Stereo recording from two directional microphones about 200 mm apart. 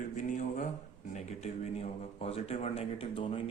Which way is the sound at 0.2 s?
40° left (ahead or behind).